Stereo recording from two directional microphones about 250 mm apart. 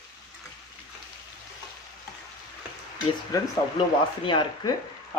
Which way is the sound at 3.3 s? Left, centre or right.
Centre.